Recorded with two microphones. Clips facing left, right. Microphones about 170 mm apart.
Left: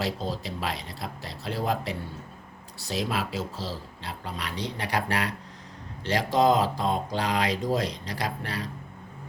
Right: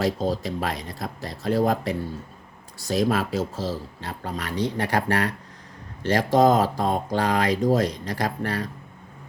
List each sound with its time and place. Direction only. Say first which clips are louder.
0.0 s speech: right 6 dB; 45° right (ahead or behind)